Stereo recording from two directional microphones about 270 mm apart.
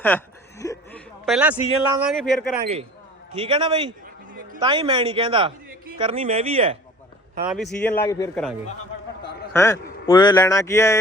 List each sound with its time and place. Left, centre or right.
0.1 s a man's voice: centre
3.4 s speech: centre
7.4 s speech: centre
9.5 s a man's voice: centre